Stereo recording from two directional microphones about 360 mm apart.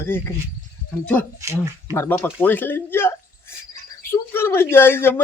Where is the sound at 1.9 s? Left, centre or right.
Centre.